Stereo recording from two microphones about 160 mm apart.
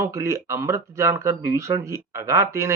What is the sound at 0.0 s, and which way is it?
Speech, 20° right (ahead or behind).